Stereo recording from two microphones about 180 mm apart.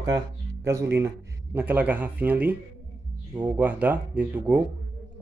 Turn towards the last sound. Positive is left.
turn(degrees=-10)  # may be behind; listen again after turning